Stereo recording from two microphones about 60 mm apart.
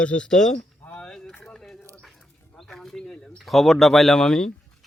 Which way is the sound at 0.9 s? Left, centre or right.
Centre.